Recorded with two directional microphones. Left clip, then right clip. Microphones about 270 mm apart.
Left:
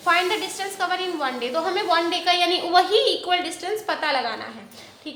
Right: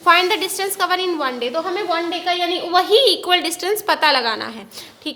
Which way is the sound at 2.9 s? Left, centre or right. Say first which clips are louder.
Right 6 dB; right.